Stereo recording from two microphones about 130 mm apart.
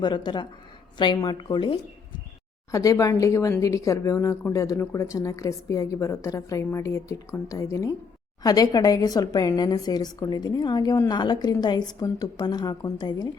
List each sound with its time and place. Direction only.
0.0 s a woman's voice: 35° left (ahead or behind)
2.7 s a woman's voice: 25° left (ahead or behind)